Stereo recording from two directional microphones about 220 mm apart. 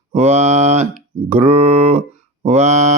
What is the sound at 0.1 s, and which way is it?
Mantra, 30° right (ahead or behind).